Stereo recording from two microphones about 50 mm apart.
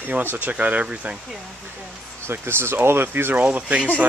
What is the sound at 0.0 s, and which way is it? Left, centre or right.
Speech, right.